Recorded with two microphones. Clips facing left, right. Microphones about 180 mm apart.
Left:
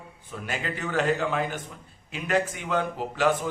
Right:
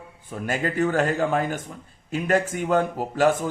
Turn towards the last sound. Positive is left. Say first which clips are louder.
# right 4 dB
turn(degrees=-45)  # may be behind; listen again after turning